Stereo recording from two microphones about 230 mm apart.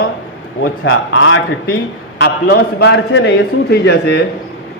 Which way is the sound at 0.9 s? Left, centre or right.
Left.